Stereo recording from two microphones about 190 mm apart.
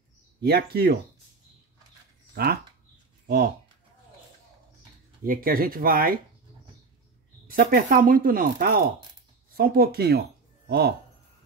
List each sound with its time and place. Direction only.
0.4 s speech: 55° right (ahead or behind)
2.3 s speech: 50° right (ahead or behind)
5.2 s speech: 50° right (ahead or behind)
7.4 s speech: 50° right (ahead or behind)